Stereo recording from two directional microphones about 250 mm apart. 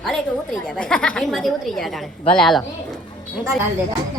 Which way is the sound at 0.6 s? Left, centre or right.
Centre.